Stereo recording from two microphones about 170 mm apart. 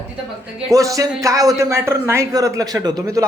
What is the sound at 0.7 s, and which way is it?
A man's voice, 20° right (ahead or behind).